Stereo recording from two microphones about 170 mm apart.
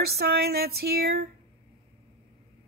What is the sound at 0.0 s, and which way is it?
A woman's voice, 70° right (ahead or behind).